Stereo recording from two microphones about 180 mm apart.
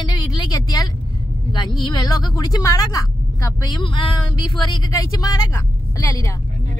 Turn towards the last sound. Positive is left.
turn(degrees=15)  # may be behind; listen again after turning